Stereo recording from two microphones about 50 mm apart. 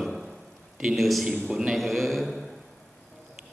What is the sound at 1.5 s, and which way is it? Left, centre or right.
Speech, centre.